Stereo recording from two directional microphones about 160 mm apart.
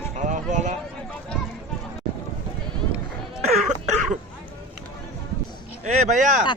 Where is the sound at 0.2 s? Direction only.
50° right (ahead or behind).